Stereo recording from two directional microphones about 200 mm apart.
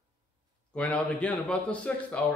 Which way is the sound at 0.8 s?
5° left (ahead or behind).